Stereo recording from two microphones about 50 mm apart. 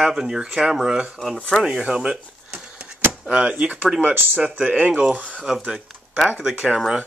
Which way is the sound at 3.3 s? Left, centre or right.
Centre.